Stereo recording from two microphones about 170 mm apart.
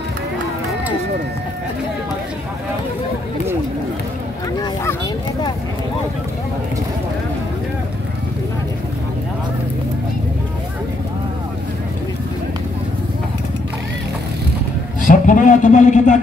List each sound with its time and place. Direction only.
15.0 s a man's voice: 50° left (ahead or behind)